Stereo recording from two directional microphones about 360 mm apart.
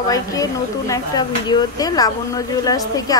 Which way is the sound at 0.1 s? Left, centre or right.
Centre.